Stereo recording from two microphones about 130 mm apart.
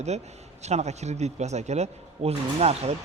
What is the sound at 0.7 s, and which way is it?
Speech, 60° right (ahead or behind).